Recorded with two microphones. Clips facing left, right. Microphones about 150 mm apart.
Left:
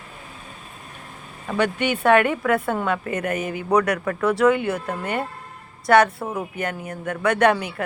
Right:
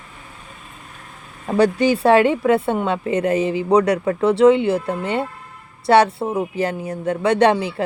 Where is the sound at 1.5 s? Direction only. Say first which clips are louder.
Right 6 dB; 35° right (ahead or behind).